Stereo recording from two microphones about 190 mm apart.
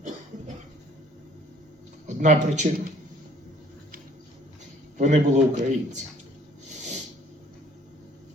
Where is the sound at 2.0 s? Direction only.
40° right (ahead or behind).